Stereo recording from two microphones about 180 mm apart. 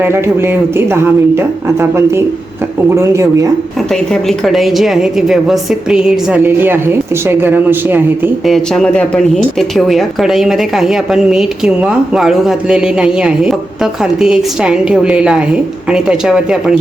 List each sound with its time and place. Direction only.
0.0 s speech: 10° right (ahead or behind)
3.9 s speech: 5° left (ahead or behind)
8.4 s speech: centre (ahead or behind)